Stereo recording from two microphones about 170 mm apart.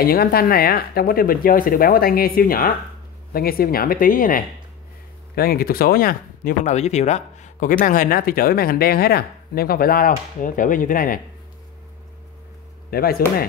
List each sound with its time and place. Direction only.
0.0 s speech: 65° left (ahead or behind)
6.6 s speech: 40° left (ahead or behind)
12.9 s speech: 60° left (ahead or behind)